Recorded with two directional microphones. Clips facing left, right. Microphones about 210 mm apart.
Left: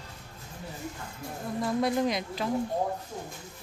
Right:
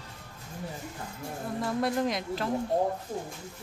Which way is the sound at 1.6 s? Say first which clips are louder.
Left 2 dB; centre (ahead or behind).